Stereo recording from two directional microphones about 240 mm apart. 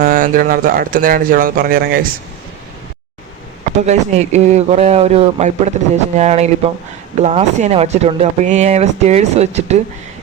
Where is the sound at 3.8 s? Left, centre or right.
Right.